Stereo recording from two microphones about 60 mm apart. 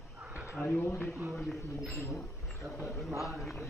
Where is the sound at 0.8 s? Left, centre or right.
Left.